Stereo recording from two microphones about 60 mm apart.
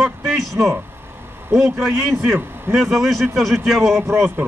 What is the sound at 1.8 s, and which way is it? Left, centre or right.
Speech, right.